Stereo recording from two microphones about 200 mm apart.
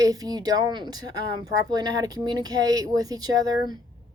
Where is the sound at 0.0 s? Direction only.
20° right (ahead or behind).